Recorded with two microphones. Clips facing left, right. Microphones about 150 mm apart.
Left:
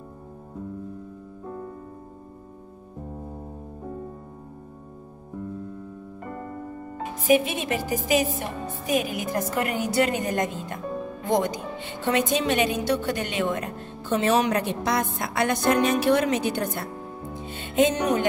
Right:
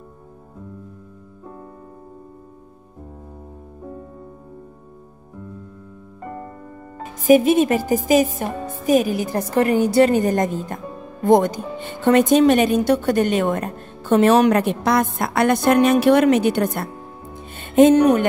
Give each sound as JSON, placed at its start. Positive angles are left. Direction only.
{"t": 7.2, "sound": "speech", "side_deg": -45}
{"t": 11.2, "sound": "speech", "side_deg": -50}
{"t": 17.5, "sound": "music", "side_deg": -50}